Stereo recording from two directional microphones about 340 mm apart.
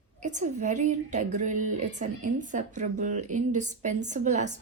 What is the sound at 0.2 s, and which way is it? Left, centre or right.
A woman's voice, right.